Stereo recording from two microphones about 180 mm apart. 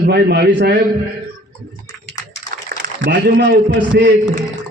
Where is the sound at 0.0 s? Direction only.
65° right (ahead or behind).